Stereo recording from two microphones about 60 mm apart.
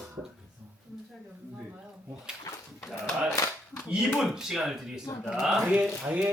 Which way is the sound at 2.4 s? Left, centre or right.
Left.